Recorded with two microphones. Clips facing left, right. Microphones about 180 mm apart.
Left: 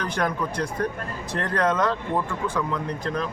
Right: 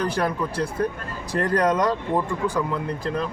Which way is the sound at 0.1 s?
5° right (ahead or behind).